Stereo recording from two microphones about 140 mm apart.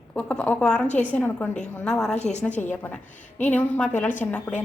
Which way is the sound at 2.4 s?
10° left (ahead or behind).